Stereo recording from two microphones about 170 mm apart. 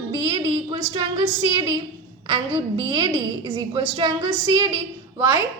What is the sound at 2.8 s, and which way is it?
A woman's voice, 25° right (ahead or behind).